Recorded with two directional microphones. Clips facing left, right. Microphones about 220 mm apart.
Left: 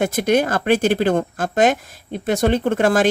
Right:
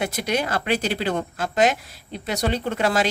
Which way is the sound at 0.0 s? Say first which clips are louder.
Left 7 dB; 50° left (ahead or behind).